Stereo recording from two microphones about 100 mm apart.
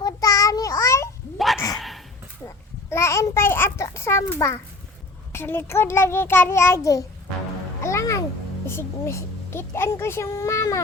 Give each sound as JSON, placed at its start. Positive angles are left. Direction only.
{"t": 0.0, "sound": "child singing", "side_deg": 35}
{"t": 1.5, "sound": "a sound", "side_deg": 35}
{"t": 2.9, "sound": "a sound", "side_deg": 30}
{"t": 5.3, "sound": "a woman's voice", "side_deg": 25}
{"t": 7.8, "sound": "music", "side_deg": 30}
{"t": 8.6, "sound": "a woman's voice", "side_deg": 25}